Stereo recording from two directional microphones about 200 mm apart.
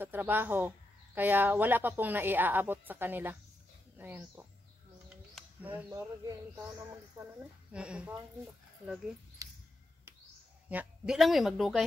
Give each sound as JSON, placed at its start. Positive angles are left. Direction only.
{"t": 0.0, "sound": "speech", "side_deg": -10}
{"t": 7.7, "sound": "a woman's voice", "side_deg": -5}
{"t": 9.4, "sound": "mouse", "side_deg": -15}
{"t": 10.7, "sound": "a woman's voice", "side_deg": -5}